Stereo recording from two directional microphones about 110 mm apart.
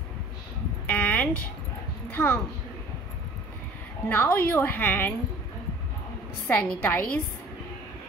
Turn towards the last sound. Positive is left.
turn(degrees=15)  # may be behind; listen again after turning